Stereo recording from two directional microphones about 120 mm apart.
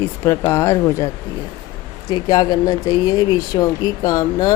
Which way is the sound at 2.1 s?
35° left (ahead or behind).